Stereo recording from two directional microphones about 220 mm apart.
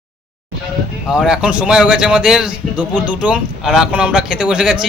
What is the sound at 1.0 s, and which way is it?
A man's voice, 5° right (ahead or behind).